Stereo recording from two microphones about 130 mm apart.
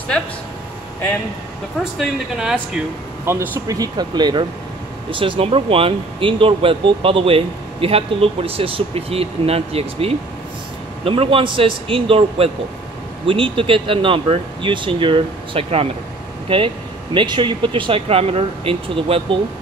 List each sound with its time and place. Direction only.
2.0 s speech: 5° right (ahead or behind)
3.3 s speech: 20° right (ahead or behind); by 19.2 s 45° right (ahead or behind)